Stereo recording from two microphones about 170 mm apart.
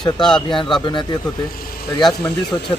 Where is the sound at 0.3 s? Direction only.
30° left (ahead or behind).